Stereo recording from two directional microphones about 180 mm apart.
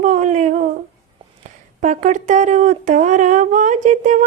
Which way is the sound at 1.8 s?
45° right (ahead or behind).